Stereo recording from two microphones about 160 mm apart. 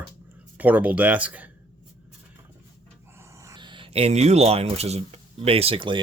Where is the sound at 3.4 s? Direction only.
25° right (ahead or behind).